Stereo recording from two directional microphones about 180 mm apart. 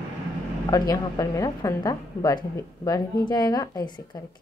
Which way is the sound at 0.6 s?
20° left (ahead or behind).